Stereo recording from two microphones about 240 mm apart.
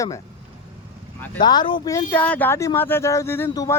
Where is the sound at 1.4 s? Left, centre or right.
Centre.